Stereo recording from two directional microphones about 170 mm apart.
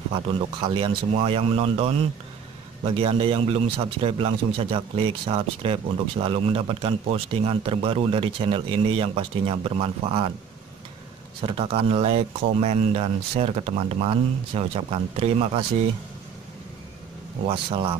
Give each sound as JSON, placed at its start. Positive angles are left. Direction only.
{"t": 0.1, "sound": "a man's voice", "side_deg": -30}
{"t": 11.4, "sound": "a man's voice", "side_deg": -35}
{"t": 17.5, "sound": "a man's voice", "side_deg": -30}